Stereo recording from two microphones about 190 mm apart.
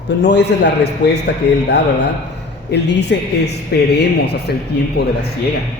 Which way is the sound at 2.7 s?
65° left (ahead or behind).